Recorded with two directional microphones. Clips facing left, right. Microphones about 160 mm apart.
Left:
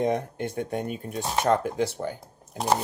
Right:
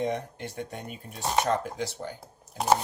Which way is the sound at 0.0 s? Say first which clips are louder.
Left 5 dB; 50° left (ahead or behind).